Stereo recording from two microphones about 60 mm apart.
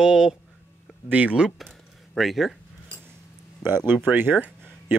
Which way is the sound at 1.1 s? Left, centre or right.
Right.